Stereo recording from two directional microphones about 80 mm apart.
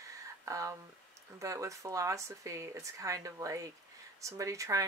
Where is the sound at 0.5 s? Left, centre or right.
Right.